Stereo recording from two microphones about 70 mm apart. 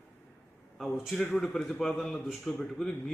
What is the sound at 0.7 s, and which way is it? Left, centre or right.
A man's voice, centre.